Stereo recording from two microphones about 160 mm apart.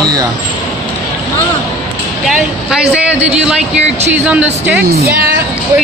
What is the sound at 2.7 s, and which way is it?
Speech, 5° right (ahead or behind).